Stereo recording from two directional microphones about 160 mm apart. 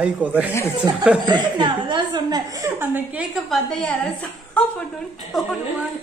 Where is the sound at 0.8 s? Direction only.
25° right (ahead or behind); by 5.5 s centre (ahead or behind).